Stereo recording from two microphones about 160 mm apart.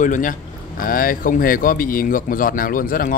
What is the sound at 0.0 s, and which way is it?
Speech, 55° left (ahead or behind).